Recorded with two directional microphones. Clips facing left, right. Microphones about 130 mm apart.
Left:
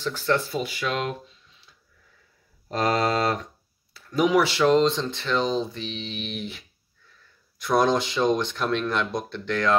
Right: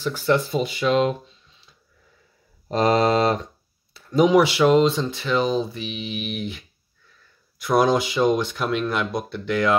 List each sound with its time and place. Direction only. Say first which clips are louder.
0.0 s speech: right 4 dB; 10° right (ahead or behind)
0.5 s speech: right 6 dB; 20° right (ahead or behind)
2.7 s speech: right 5 dB; 20° right (ahead or behind)